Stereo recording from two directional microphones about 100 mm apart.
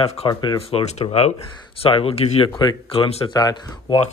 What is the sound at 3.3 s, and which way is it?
Speech, 45° left (ahead or behind).